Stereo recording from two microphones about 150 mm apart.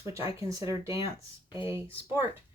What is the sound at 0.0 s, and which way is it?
Speech, 20° right (ahead or behind).